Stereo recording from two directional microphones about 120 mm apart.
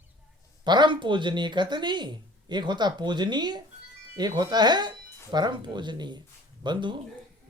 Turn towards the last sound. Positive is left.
turn(degrees=-40)  # may be behind; listen again after turning